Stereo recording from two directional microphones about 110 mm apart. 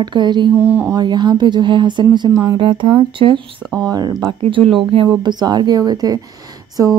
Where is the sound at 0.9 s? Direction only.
40° right (ahead or behind).